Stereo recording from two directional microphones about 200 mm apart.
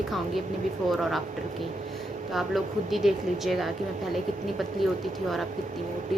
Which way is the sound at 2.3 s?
Centre (ahead or behind).